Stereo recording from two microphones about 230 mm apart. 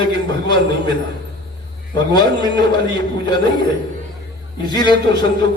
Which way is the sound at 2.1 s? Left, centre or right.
Centre.